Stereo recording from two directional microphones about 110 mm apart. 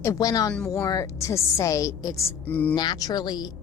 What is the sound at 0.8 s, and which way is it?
A woman's voice, 30° left (ahead or behind).